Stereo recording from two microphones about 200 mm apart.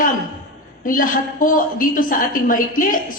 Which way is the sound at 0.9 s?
45° left (ahead or behind).